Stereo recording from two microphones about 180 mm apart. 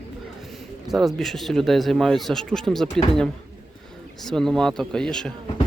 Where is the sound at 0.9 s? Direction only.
Centre (ahead or behind).